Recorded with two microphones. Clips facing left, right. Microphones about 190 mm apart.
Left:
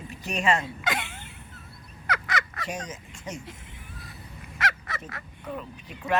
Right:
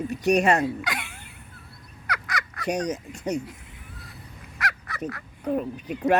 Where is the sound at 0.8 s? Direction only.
25° left (ahead or behind).